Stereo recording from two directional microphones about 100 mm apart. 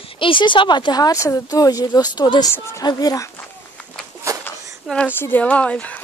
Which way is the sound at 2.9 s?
40° left (ahead or behind).